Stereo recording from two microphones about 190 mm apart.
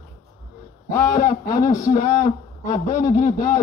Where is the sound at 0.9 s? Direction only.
15° left (ahead or behind).